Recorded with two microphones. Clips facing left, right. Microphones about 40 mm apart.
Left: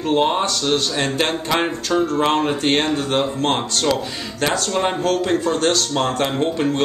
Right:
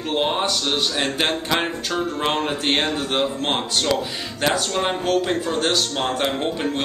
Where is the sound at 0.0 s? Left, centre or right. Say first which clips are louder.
Left 4 dB; centre.